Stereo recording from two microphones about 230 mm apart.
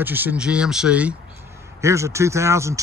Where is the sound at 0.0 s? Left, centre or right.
Centre.